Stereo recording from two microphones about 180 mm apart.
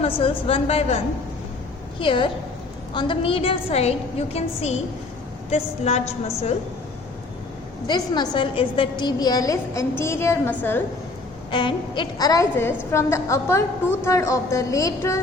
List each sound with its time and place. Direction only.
0.0 s a woman's voice: 35° left (ahead or behind)
5.5 s a woman's voice: 35° left (ahead or behind)
7.9 s a woman's voice: 25° left (ahead or behind)
11.5 s a woman's voice: 25° left (ahead or behind)